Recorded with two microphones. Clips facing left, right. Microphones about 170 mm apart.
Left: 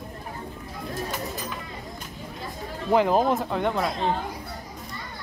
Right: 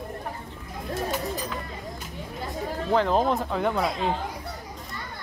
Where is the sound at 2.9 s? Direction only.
10° left (ahead or behind).